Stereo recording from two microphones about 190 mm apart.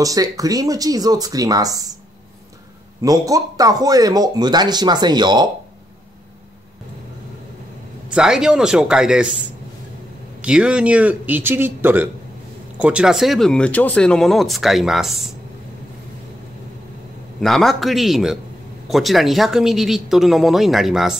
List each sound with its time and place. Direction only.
0.0 s speech: 20° right (ahead or behind)
3.0 s speech: 20° right (ahead or behind)
8.1 s speech: 5° right (ahead or behind)
10.4 s speech: 5° right (ahead or behind)
17.4 s speech: centre (ahead or behind)